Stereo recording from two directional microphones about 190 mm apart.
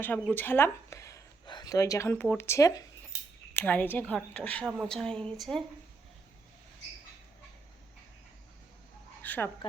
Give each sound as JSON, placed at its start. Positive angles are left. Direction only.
{"t": 0.0, "sound": "a woman's voice", "side_deg": 10}
{"t": 9.2, "sound": "a woman's voice", "side_deg": 10}